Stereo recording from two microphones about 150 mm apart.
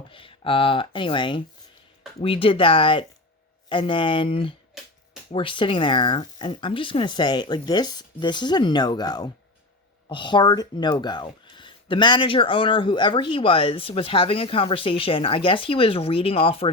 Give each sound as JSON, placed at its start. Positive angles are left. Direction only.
{"t": 0.1, "sound": "speech", "side_deg": 35}